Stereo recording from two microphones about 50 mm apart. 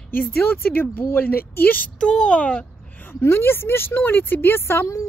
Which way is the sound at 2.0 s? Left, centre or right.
Centre.